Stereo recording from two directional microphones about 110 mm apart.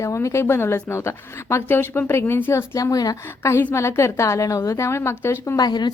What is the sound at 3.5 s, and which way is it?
A woman's voice, 25° left (ahead or behind).